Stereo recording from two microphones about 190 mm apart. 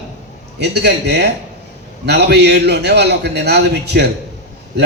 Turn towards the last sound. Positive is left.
turn(degrees=-60)  # may be behind; listen again after turning